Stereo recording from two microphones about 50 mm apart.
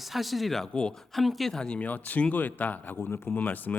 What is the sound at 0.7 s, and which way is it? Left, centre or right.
Speech, centre.